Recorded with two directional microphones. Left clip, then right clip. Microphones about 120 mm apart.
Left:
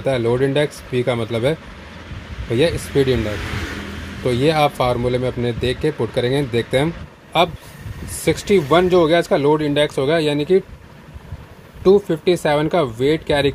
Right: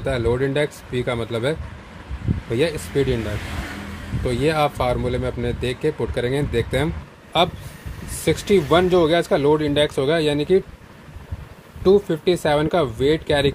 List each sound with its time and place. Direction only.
0.0 s speech: 20° left (ahead or behind)
4.3 s speech: 25° left (ahead or behind)
7.3 s speech: 5° left (ahead or behind)
11.8 s speech: 15° left (ahead or behind)